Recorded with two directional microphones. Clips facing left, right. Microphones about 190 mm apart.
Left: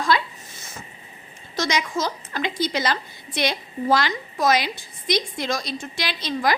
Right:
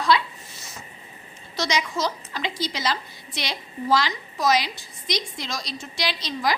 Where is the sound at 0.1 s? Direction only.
50° left (ahead or behind).